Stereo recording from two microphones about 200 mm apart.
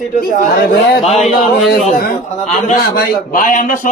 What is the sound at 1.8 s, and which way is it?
A man's voice, 40° left (ahead or behind).